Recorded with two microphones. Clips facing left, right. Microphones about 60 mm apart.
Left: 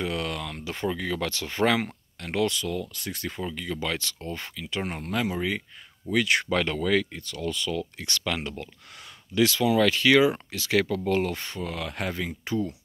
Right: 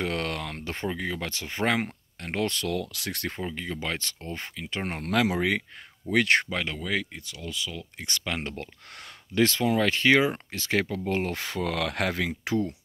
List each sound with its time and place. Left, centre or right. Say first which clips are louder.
0.0 s speech: even; right
0.8 s speech: left 3 dB; right
2.5 s speech: right 1 dB; right
3.5 s speech: left 2 dB; right
5.0 s speech: right 5 dB; right
6.1 s speech: right 2 dB; right
6.5 s speech: left 6 dB; centre
8.0 s speech: left 2 dB; right
9.3 s speech: left 1 dB; right
11.3 s speech: right 4 dB; right